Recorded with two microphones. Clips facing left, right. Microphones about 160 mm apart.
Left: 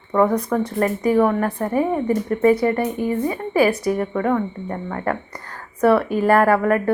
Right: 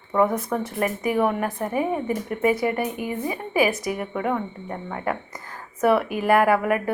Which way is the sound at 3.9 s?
10° right (ahead or behind).